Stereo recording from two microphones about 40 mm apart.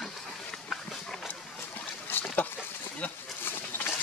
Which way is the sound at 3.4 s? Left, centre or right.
Left.